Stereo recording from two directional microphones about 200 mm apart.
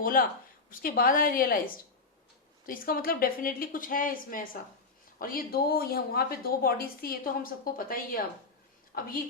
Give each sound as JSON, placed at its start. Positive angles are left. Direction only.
{"t": 0.0, "sound": "a woman's voice", "side_deg": 45}